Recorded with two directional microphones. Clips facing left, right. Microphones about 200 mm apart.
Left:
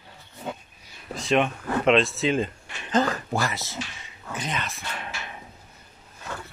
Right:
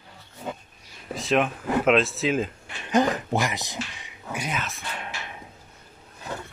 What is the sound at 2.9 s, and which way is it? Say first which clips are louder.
Speech: right 2 dB; 20° right (ahead or behind).